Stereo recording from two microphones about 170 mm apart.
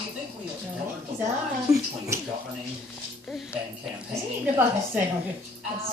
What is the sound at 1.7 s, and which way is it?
Speech, centre (ahead or behind).